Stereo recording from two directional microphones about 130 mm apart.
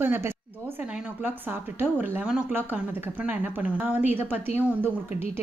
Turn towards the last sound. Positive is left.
turn(degrees=-20)  # may be behind; listen again after turning